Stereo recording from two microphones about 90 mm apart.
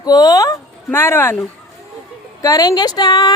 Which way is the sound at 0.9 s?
25° left (ahead or behind).